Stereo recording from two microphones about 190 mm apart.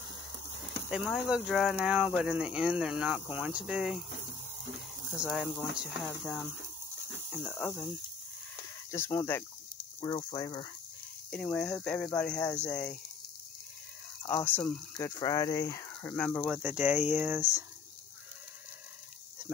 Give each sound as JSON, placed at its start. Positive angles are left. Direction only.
{"t": 0.8, "sound": "speech", "side_deg": 0}
{"t": 5.2, "sound": "speech", "side_deg": -5}
{"t": 8.9, "sound": "speech", "side_deg": 15}
{"t": 9.9, "sound": "speech", "side_deg": 25}
{"t": 11.2, "sound": "speech", "side_deg": 5}
{"t": 14.3, "sound": "speech", "side_deg": 10}
{"t": 15.0, "sound": "speech", "side_deg": 20}
{"t": 15.9, "sound": "speech", "side_deg": 5}
{"t": 16.5, "sound": "speech", "side_deg": -5}